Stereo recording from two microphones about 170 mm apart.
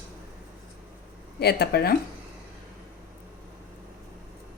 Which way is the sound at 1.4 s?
70° left (ahead or behind).